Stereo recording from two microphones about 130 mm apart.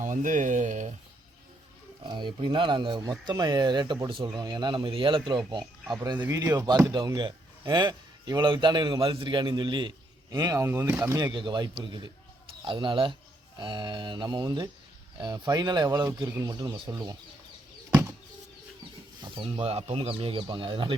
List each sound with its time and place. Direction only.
0.0 s speech: 85° right
2.0 s speech: 35° right (ahead or behind)
10.3 s speech: 25° right (ahead or behind)
11.2 s speech: 35° right (ahead or behind)
19.2 s speech: 40° right (ahead or behind)